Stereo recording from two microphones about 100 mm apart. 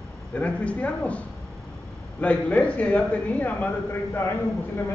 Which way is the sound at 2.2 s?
15° left (ahead or behind).